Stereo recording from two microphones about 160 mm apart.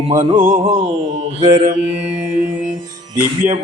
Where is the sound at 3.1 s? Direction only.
55° right (ahead or behind).